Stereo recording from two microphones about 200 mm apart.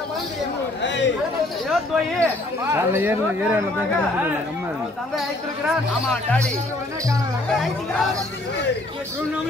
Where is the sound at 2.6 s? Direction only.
10° right (ahead or behind).